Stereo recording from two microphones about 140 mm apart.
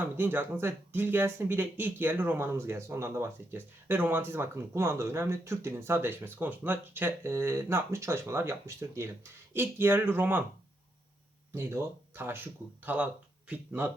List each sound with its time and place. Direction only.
0.0 s speech: 15° right (ahead or behind)
11.5 s speech: 15° right (ahead or behind)